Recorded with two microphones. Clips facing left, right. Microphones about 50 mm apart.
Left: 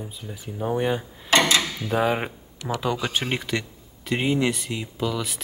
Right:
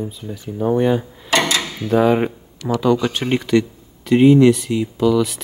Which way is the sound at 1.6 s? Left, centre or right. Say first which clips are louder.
Right 2 dB; centre.